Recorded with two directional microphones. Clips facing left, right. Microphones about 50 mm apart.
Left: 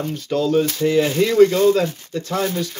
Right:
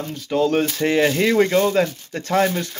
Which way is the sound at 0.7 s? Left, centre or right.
Right.